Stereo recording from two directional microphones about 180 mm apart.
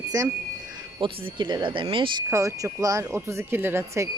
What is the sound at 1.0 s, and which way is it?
Speech, 25° right (ahead or behind).